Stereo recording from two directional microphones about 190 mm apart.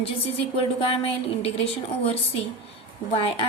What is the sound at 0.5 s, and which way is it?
Speech, 30° left (ahead or behind).